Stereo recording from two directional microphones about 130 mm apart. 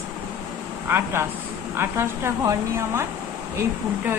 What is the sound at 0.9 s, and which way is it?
A woman's voice, 20° right (ahead or behind).